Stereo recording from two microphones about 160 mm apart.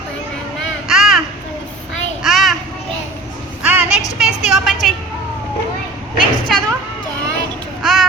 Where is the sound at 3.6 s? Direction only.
10° right (ahead or behind).